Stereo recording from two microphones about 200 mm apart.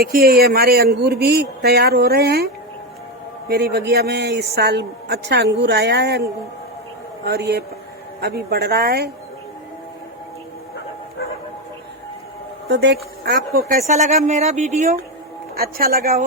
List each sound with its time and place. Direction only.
0.0 s a man's voice: 50° right (ahead or behind)
3.5 s a man's voice: 55° right (ahead or behind)
7.3 s a man's voice: 55° right (ahead or behind)
12.6 s speech: 55° right (ahead or behind); by 15.0 s 35° right (ahead or behind)
15.5 s a man's voice: 50° right (ahead or behind)